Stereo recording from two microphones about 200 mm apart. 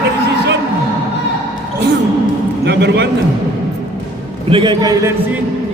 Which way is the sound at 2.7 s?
55° right (ahead or behind).